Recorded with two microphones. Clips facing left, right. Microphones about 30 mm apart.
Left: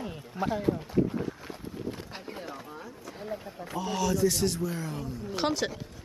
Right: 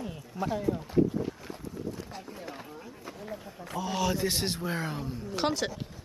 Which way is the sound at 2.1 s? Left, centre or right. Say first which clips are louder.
Left 2 dB; left.